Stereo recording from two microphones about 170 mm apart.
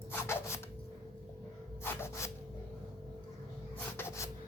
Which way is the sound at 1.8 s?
15° left (ahead or behind).